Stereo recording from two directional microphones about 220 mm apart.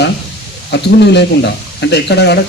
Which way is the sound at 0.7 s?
50° left (ahead or behind).